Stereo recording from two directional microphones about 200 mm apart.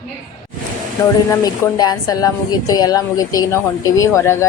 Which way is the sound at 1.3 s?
20° left (ahead or behind).